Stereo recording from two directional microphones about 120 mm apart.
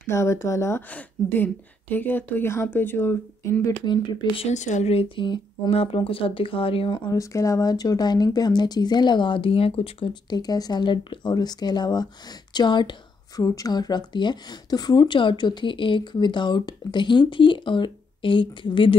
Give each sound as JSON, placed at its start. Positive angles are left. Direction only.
{"t": 0.0, "sound": "a woman's voice", "side_deg": 25}
{"t": 3.8, "sound": "a woman's voice", "side_deg": 40}
{"t": 4.5, "sound": "speech", "side_deg": 85}
{"t": 5.1, "sound": "speech", "side_deg": 45}
{"t": 7.1, "sound": "a woman's voice", "side_deg": 25}
{"t": 10.3, "sound": "a woman's voice", "side_deg": 35}